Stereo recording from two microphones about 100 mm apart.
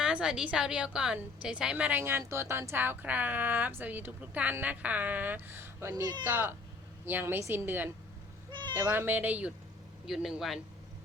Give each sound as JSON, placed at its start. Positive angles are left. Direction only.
{"t": 0.0, "sound": "a woman's voice", "side_deg": -10}
{"t": 5.9, "sound": "speech", "side_deg": -40}
{"t": 6.2, "sound": "a woman's voice", "side_deg": -20}
{"t": 10.1, "sound": "a man's voice", "side_deg": -5}